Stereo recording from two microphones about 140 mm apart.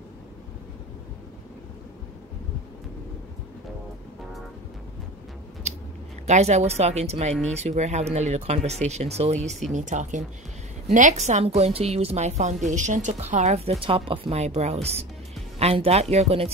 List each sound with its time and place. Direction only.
6.2 s a woman's voice: 55° right (ahead or behind)